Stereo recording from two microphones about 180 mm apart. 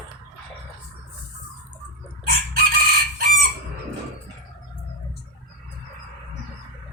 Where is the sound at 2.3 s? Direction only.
55° right (ahead or behind).